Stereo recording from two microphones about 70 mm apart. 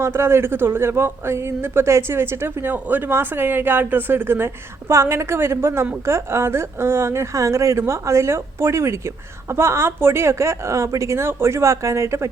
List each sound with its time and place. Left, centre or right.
0.0 s a woman's voice: right